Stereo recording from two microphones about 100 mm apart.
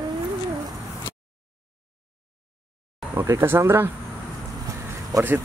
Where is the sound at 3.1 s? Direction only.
25° right (ahead or behind).